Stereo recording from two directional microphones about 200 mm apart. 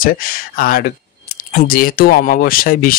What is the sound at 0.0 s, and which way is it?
Speech, 45° left (ahead or behind).